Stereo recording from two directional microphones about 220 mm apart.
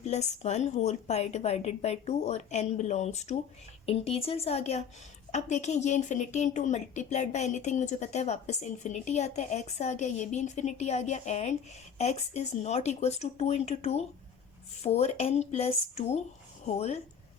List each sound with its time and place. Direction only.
0.0 s a woman's voice: 30° left (ahead or behind)